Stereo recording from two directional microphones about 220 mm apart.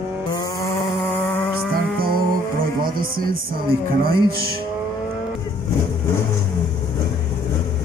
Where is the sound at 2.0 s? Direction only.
40° right (ahead or behind).